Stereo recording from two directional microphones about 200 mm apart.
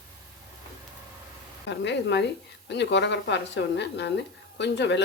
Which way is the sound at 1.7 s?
60° left (ahead or behind).